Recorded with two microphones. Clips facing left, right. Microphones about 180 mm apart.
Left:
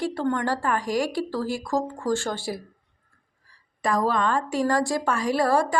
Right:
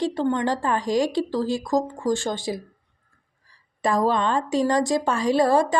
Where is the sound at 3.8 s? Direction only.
25° right (ahead or behind).